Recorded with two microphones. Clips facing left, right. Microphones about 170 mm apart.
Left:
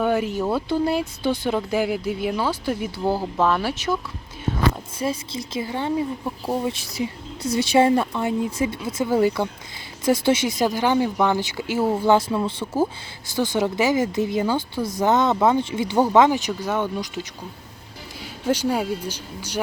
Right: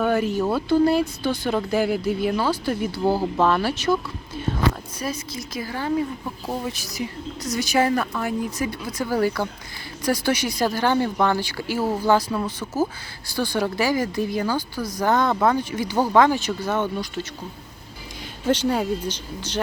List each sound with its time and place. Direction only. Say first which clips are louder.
0.0 s speech: right 1 dB; 15° left (ahead or behind)
3.0 s speech: right 2 dB; 5° right (ahead or behind)
3.3 s speech: right 1 dB; 5° left (ahead or behind)
4.9 s speech: left 3 dB; 25° left (ahead or behind); by 19.5 s 10° left (ahead or behind)